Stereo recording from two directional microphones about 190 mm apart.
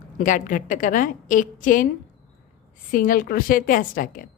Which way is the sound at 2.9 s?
45° left (ahead or behind).